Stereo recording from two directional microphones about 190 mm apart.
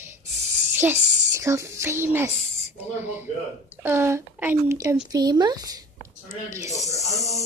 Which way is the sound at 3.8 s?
15° right (ahead or behind).